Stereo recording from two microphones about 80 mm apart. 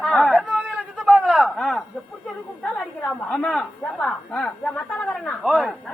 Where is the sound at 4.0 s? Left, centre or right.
Centre.